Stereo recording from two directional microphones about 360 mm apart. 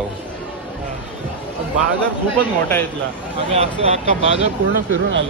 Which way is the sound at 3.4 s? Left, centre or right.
Centre.